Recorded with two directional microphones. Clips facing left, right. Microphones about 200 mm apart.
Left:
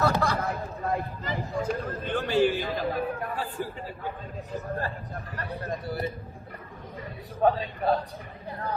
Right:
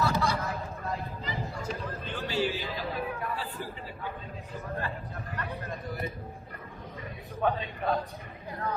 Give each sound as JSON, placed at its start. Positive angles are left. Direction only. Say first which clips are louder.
{"t": 0.1, "sound": "chatter", "louder": "left 3 dB", "side_deg": 60}
{"t": 5.4, "sound": "speech", "louder": "left 5 dB", "side_deg": 35}
{"t": 7.4, "sound": "speech", "louder": "left 5 dB", "side_deg": 35}